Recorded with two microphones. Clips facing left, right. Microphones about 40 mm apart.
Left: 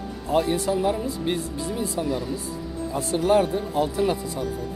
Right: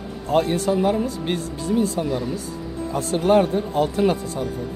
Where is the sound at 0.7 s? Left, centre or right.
Centre.